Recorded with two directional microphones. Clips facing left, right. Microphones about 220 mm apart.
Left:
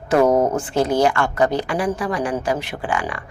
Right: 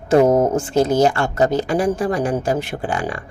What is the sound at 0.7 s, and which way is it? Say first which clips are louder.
Speech: right 3 dB; 45° right (ahead or behind).